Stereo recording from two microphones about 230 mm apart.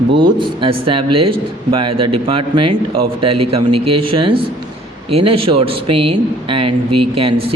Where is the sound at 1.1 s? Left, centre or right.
Right.